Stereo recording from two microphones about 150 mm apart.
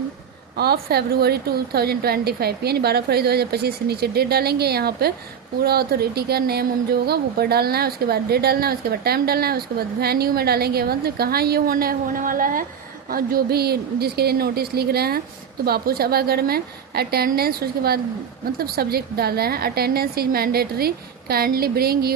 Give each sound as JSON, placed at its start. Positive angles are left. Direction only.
{"t": 0.5, "sound": "speech", "side_deg": -90}
{"t": 13.1, "sound": "speech", "side_deg": -75}